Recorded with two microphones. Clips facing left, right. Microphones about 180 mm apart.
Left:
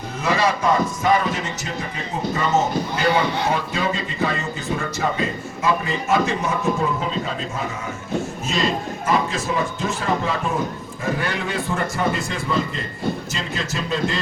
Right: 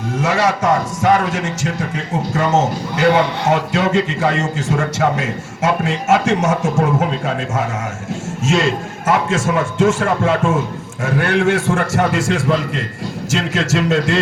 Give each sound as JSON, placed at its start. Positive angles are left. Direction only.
{"t": 0.2, "sound": "a man's voice", "side_deg": -75}
{"t": 6.8, "sound": "a man's voice", "side_deg": -70}